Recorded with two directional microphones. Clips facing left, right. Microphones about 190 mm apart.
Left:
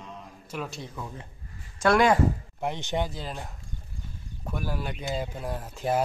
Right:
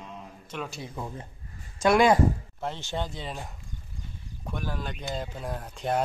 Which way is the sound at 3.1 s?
Centre (ahead or behind).